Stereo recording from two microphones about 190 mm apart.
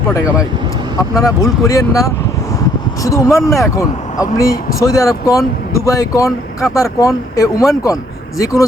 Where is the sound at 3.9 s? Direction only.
40° left (ahead or behind).